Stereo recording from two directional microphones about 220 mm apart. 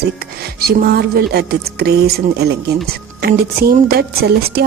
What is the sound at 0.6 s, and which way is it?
A woman's voice, 45° right (ahead or behind).